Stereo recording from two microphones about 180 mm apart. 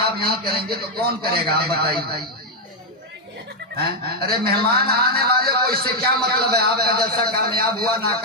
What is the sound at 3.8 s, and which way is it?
A man's voice, 60° right (ahead or behind).